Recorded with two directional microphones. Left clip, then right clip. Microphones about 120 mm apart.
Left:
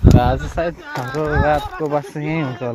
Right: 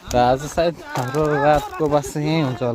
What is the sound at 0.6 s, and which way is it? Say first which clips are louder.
Speech: right 1 dB; 45° right (ahead or behind).